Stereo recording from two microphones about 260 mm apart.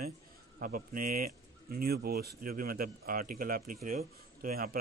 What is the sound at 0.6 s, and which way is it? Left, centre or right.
Speech, right.